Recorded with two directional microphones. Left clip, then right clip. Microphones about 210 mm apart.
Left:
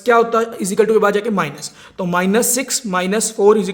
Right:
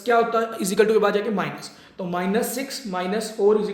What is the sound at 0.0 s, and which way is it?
A man's voice, 35° left (ahead or behind).